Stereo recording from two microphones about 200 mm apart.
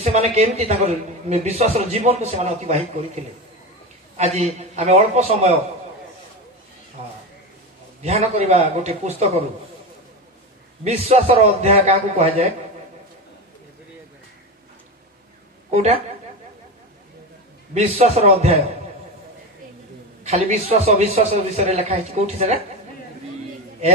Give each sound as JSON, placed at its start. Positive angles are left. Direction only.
{"t": 0.0, "sound": "a man's voice", "side_deg": -30}
{"t": 4.2, "sound": "a man's voice", "side_deg": -30}
{"t": 8.0, "sound": "a man's voice", "side_deg": -30}
{"t": 10.8, "sound": "a man's voice", "side_deg": -30}
{"t": 15.7, "sound": "a man's voice", "side_deg": -30}
{"t": 17.7, "sound": "a man's voice", "side_deg": -30}
{"t": 20.2, "sound": "a man's voice", "side_deg": -35}